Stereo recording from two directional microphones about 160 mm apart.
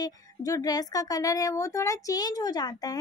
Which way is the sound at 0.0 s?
25° left (ahead or behind).